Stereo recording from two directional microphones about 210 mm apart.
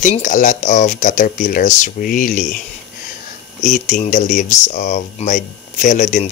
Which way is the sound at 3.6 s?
35° left (ahead or behind).